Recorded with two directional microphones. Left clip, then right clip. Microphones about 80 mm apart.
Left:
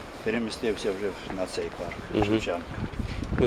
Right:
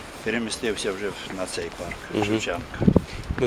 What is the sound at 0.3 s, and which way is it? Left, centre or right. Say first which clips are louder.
Speech: right 2 dB; right.